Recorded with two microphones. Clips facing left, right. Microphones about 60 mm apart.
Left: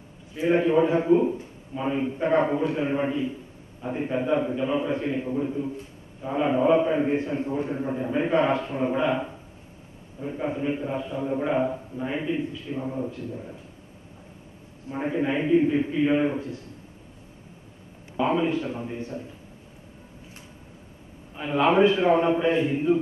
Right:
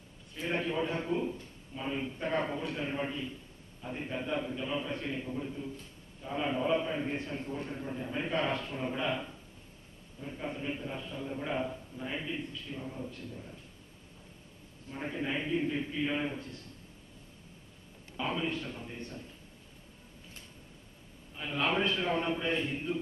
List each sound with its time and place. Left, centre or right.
0.3 s a man's voice: centre
14.9 s a man's voice: left
18.1 s a man's voice: left
21.4 s a man's voice: left